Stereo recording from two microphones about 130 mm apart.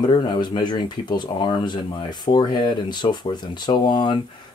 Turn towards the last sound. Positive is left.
turn(degrees=35)  # may be behind; listen again after turning